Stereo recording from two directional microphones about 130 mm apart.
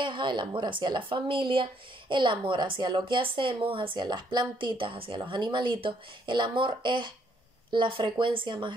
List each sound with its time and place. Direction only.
0.0 s speech: 40° right (ahead or behind)